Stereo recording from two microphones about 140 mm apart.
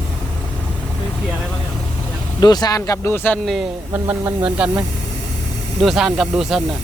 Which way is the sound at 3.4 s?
Centre (ahead or behind).